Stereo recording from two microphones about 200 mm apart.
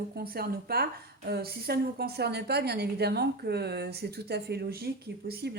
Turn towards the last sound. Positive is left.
turn(degrees=-50)  # may be behind; listen again after turning